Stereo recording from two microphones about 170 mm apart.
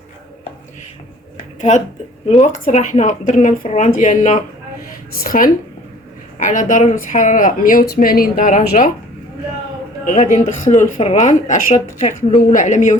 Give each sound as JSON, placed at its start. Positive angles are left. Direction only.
{"t": 2.4, "sound": "speech", "side_deg": 45}
{"t": 10.1, "sound": "speech", "side_deg": 45}